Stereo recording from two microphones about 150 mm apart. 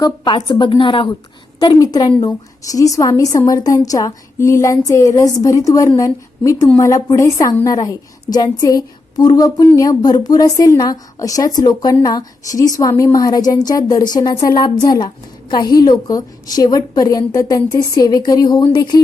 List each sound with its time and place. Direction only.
0.0 s a woman's voice: 30° left (ahead or behind)